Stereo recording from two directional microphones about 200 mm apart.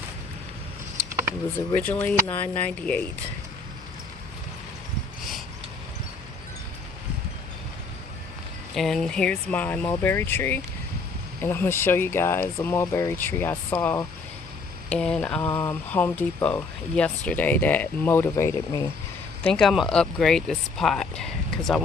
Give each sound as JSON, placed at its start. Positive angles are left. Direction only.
{"t": 1.5, "sound": "speech", "side_deg": 10}
{"t": 8.7, "sound": "speech", "side_deg": 0}